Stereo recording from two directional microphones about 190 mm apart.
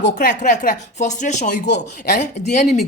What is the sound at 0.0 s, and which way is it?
Speech, 40° left (ahead or behind).